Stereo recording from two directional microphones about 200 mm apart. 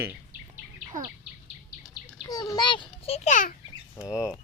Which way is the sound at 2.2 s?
15° left (ahead or behind).